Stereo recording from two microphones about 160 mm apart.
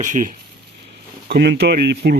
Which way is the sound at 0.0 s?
50° right (ahead or behind).